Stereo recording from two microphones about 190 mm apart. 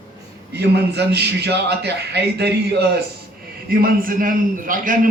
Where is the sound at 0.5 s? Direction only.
60° right (ahead or behind).